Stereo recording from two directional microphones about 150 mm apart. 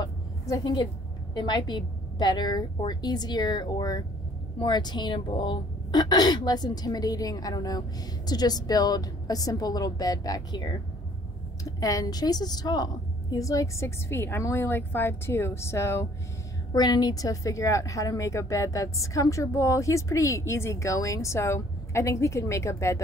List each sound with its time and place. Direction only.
0.0 s a sound: 25° left (ahead or behind)
1.3 s a woman's voice: 30° left (ahead or behind)
11.8 s a woman's voice: 25° left (ahead or behind)